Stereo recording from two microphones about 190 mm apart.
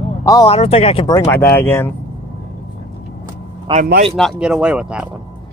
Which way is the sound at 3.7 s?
50° right (ahead or behind).